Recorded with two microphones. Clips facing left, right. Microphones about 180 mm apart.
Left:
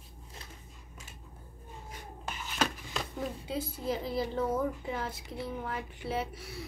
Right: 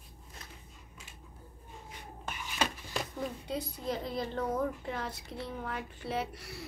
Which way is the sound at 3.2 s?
Centre (ahead or behind).